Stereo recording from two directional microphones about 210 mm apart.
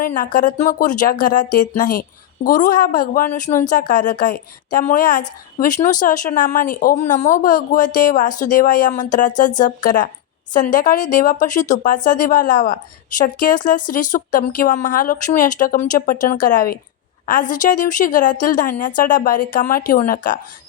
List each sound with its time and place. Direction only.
0.0 s speech: 40° left (ahead or behind)